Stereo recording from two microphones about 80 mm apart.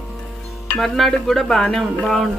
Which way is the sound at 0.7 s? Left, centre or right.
Centre.